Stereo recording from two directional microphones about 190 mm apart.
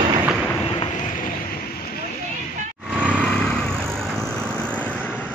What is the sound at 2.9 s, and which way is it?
Vehicle, 5° right (ahead or behind).